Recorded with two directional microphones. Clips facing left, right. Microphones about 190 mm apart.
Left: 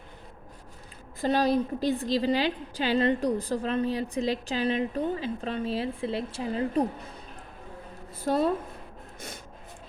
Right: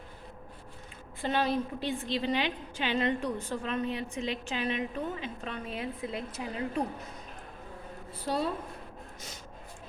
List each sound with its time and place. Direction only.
1.2 s a woman's voice: 40° left (ahead or behind)
8.2 s a woman's voice: 50° left (ahead or behind)